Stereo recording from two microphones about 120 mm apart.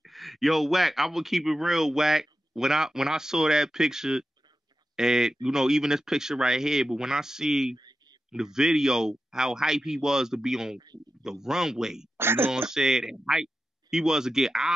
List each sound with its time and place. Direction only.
0.0 s speech: centre (ahead or behind)
12.2 s speech: 20° right (ahead or behind)
12.4 s speech: 5° right (ahead or behind)